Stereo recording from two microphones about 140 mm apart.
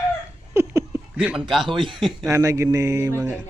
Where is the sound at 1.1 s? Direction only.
10° right (ahead or behind).